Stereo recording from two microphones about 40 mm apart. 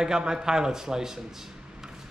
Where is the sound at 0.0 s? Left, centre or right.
Centre.